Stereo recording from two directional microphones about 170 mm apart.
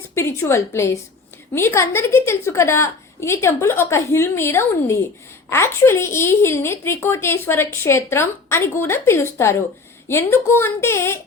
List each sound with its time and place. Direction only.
0.1 s a woman's voice: 15° left (ahead or behind)